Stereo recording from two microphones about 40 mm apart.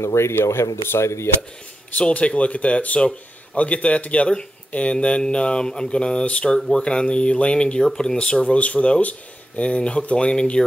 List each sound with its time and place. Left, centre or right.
0.2 s speech: left
2.0 s speech: left
8.5 s speech: left